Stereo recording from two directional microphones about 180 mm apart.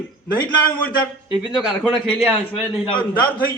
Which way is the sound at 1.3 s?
5° right (ahead or behind).